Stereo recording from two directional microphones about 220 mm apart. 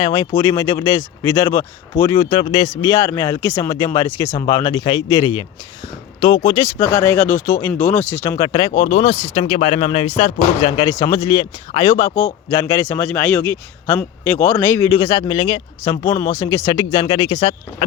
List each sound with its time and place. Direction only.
0.0 s speech: 15° left (ahead or behind)
10.9 s speech: 15° left (ahead or behind)